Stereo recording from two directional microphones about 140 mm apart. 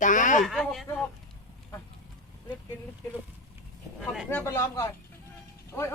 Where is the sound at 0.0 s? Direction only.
65° left (ahead or behind).